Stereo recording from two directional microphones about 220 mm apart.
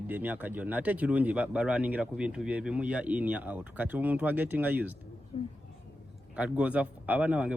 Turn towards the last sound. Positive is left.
turn(degrees=-5)  # may be behind; listen again after turning